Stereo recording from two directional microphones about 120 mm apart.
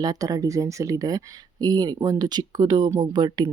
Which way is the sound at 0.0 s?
30° right (ahead or behind).